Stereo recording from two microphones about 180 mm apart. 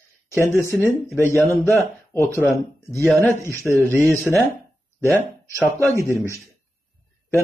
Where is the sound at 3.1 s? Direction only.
10° left (ahead or behind).